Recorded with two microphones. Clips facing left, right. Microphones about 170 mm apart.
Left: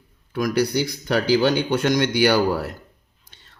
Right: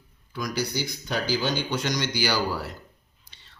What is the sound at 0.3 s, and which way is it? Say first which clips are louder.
Speech: left 8 dB; 60° left (ahead or behind).